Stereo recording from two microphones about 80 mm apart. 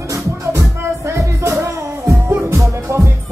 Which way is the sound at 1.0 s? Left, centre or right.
Right.